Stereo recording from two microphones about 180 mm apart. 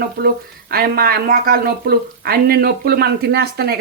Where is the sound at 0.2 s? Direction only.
55° right (ahead or behind).